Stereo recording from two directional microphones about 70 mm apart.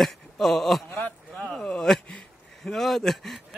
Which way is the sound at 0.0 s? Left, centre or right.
Centre.